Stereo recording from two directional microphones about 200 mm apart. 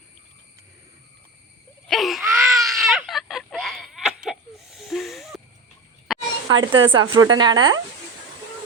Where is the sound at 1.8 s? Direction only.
Centre (ahead or behind).